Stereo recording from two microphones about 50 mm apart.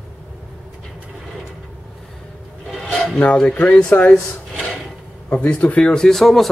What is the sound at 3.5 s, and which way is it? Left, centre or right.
Speech, left.